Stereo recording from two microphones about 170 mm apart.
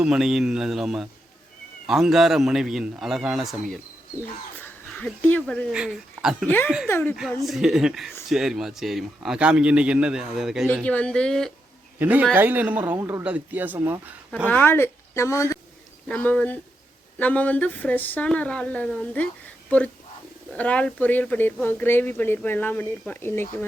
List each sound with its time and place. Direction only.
0.0 s a man's voice: 5° right (ahead or behind)
4.5 s a sound: 10° left (ahead or behind)
5.7 s a man's voice: 5° right (ahead or behind)
6.8 s speech: 15° left (ahead or behind)
7.4 s a man's voice: centre (ahead or behind)
11.9 s a man's voice: 10° right (ahead or behind)
14.4 s speech: 10° left (ahead or behind)